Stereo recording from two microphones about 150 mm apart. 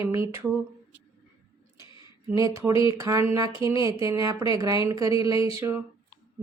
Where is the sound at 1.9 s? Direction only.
30° left (ahead or behind).